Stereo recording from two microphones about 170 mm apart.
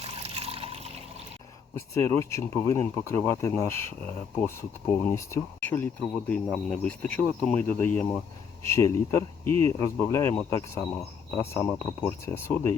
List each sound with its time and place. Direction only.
0.0 s water: 35° right (ahead or behind)
1.7 s speech: 15° left (ahead or behind)